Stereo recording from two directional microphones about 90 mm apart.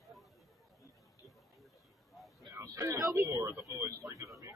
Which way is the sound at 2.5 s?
35° right (ahead or behind).